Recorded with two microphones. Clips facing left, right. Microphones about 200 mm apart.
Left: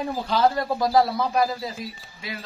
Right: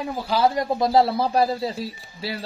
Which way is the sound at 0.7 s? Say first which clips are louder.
Right 2 dB; 25° right (ahead or behind).